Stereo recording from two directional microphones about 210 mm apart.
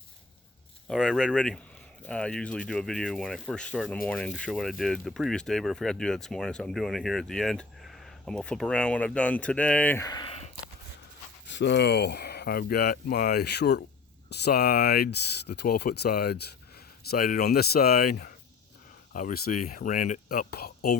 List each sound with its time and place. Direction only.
0.9 s speech: 5° left (ahead or behind); by 10.5 s 25° left (ahead or behind)
11.4 s speech: 55° left (ahead or behind)